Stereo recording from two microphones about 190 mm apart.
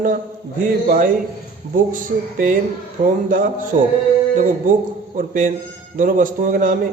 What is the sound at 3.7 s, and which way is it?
A man's voice, 35° right (ahead or behind).